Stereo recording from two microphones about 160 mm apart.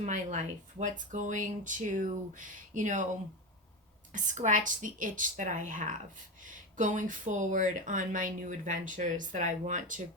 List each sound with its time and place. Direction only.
0.0 s speech: 50° right (ahead or behind)
4.1 s speech: 50° right (ahead or behind)